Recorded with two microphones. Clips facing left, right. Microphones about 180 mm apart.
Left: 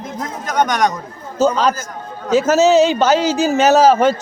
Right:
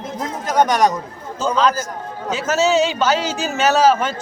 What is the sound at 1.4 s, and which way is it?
Speech, 40° left (ahead or behind).